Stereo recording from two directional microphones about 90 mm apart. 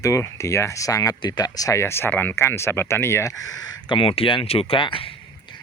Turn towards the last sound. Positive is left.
turn(degrees=80)